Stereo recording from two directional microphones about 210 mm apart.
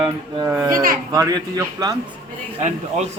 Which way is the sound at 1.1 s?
15° right (ahead or behind).